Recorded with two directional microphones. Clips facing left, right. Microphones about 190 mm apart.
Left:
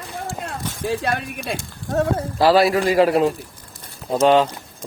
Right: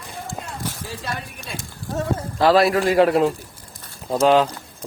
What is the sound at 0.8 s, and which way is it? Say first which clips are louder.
Speech: left 8 dB; 60° left (ahead or behind).